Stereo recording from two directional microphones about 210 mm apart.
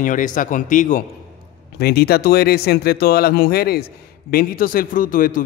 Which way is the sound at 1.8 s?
50° left (ahead or behind).